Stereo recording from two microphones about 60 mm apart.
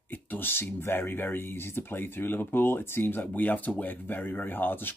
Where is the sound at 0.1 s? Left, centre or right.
Left.